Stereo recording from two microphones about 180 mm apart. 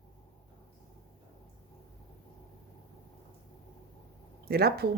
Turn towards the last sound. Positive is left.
turn(degrees=-60)  # may be behind; listen again after turning